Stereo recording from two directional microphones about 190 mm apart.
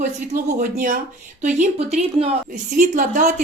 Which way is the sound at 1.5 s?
35° right (ahead or behind).